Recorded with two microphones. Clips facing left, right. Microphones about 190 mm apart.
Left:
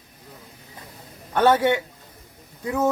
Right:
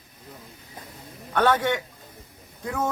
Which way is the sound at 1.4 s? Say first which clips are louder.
Left 4 dB; 10° left (ahead or behind).